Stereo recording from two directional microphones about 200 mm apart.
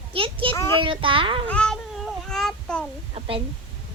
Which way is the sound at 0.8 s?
25° right (ahead or behind).